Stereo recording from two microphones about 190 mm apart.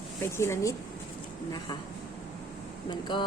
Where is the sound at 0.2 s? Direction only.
15° left (ahead or behind).